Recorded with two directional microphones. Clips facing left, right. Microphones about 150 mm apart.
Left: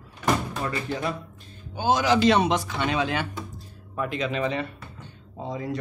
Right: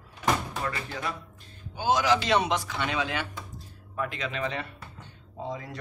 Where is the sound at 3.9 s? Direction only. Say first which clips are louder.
Left 5 dB; 20° left (ahead or behind).